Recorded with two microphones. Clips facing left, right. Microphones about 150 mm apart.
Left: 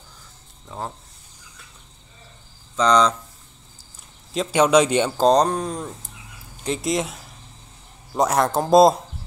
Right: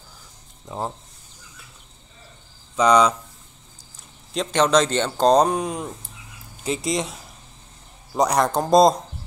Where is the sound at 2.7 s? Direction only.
10° right (ahead or behind).